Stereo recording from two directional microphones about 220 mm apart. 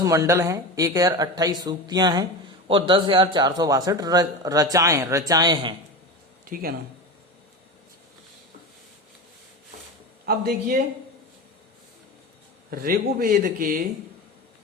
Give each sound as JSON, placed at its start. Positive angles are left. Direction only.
{"t": 0.0, "sound": "a man's voice", "side_deg": -15}
{"t": 6.4, "sound": "speech", "side_deg": -40}
{"t": 10.2, "sound": "speech", "side_deg": -45}
{"t": 12.7, "sound": "speech", "side_deg": -40}